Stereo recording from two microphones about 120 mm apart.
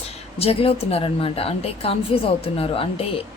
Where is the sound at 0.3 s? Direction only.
55° left (ahead or behind).